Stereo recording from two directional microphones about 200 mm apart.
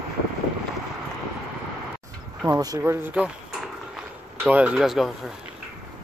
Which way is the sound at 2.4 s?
20° right (ahead or behind).